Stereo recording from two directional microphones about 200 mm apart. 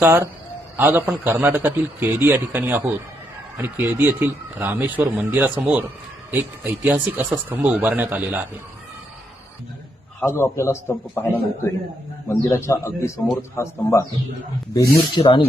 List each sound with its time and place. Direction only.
0.0 s a man's voice: 10° right (ahead or behind)
6.8 s a man's voice: 5° right (ahead or behind)
10.2 s a man's voice: 10° left (ahead or behind)